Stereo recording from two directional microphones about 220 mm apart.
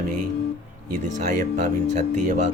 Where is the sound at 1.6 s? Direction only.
35° right (ahead or behind).